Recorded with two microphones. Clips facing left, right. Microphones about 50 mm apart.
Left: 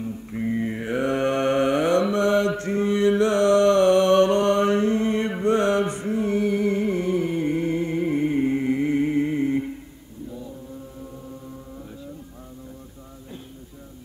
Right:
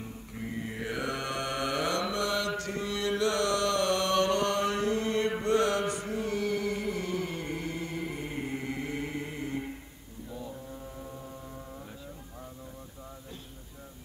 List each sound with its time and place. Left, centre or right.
0.3 s mantra: left
5.4 s chant: left